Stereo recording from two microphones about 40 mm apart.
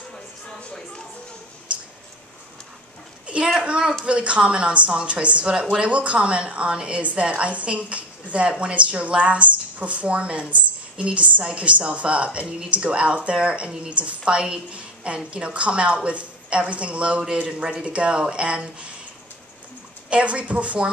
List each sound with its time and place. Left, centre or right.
3.3 s a sound: right
3.6 s a woman's voice: right
20.1 s a woman's voice: right